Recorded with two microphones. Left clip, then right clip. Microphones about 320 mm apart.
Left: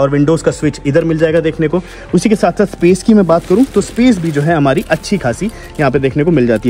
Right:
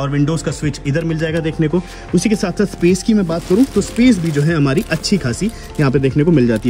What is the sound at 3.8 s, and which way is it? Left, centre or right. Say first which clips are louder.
Speech: left 2 dB; centre.